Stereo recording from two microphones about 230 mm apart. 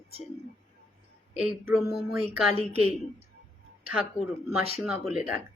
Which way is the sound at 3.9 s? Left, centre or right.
Centre.